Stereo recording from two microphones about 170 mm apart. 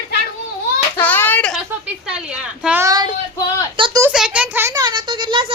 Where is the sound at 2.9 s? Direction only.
25° right (ahead or behind).